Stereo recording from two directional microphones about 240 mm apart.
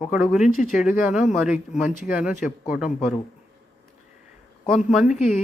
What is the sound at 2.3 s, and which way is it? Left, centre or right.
Speech, left.